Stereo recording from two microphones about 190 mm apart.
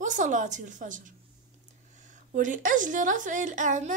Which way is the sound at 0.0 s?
40° right (ahead or behind).